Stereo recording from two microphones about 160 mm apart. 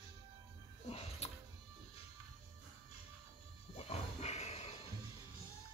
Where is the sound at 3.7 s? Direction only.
40° left (ahead or behind).